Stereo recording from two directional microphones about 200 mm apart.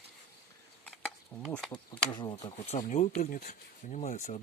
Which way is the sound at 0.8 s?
5° left (ahead or behind).